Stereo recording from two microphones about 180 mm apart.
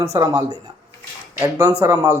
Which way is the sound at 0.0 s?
20° right (ahead or behind).